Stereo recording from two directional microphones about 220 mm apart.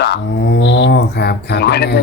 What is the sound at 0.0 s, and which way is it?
Speech, 50° left (ahead or behind).